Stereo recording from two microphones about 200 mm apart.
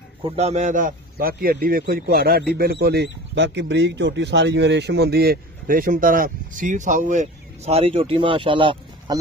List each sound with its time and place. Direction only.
0.2 s a man's voice: 30° right (ahead or behind)